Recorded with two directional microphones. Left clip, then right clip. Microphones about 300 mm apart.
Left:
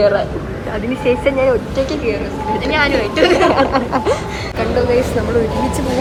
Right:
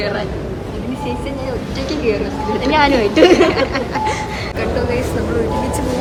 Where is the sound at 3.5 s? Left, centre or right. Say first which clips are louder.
Left 4 dB; centre.